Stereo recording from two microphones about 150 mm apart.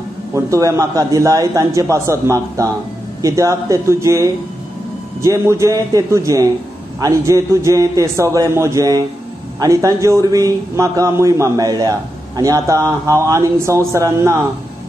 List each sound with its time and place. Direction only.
0.3 s a man's voice: 20° right (ahead or behind)